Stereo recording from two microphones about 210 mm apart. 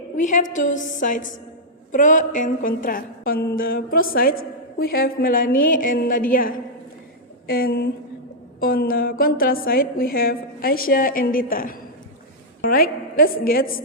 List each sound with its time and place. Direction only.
0.2 s a woman's voice: 35° left (ahead or behind)